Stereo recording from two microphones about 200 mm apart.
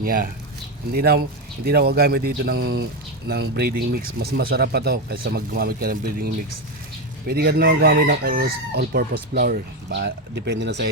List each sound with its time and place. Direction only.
0.0 s crowing: 45° right (ahead or behind)